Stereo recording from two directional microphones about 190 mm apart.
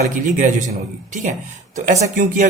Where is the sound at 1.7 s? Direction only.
35° right (ahead or behind).